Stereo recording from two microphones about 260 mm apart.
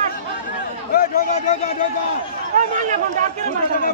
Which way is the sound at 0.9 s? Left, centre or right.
Left.